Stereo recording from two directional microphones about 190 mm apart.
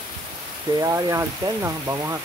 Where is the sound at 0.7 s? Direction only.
20° right (ahead or behind).